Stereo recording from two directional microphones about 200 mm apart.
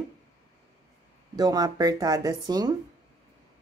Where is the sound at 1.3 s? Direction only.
20° right (ahead or behind).